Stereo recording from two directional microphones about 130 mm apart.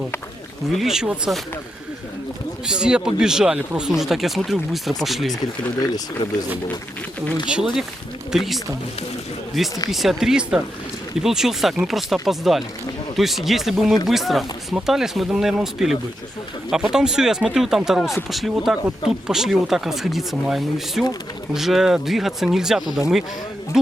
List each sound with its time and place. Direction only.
0.7 s speech: centre (ahead or behind)
2.6 s speech: 5° right (ahead or behind)
5.8 s speech: 30° left (ahead or behind)
7.5 s speech: 5° right (ahead or behind)